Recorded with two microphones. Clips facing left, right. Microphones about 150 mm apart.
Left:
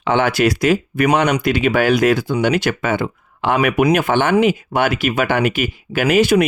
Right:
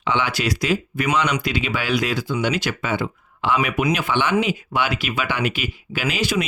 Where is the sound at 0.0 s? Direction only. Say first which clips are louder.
Left 7 dB; 50° left (ahead or behind).